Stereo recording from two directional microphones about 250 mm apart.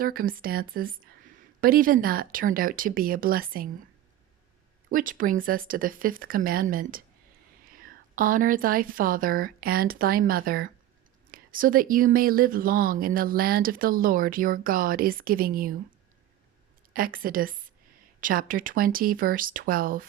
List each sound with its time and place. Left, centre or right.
0.0 s speech: right
4.9 s speech: right
16.9 s speech: right